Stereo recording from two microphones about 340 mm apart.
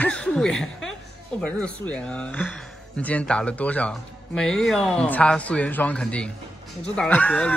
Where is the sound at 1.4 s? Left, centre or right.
Centre.